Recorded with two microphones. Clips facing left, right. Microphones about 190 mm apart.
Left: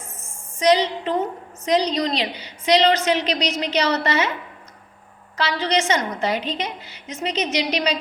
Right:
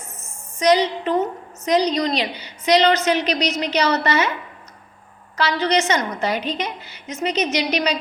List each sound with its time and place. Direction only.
0.2 s a sound: 25° left (ahead or behind)
1.6 s a woman's voice: 25° left (ahead or behind)
5.4 s a woman's voice: 25° left (ahead or behind)